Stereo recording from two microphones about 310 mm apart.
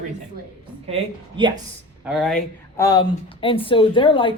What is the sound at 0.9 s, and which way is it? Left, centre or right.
Speech, centre.